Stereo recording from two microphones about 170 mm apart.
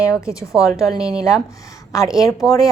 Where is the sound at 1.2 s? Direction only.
20° left (ahead or behind).